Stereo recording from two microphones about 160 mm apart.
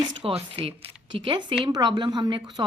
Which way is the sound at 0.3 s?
35° right (ahead or behind).